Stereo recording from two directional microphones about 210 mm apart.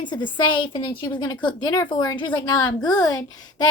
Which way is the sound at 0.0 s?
20° left (ahead or behind).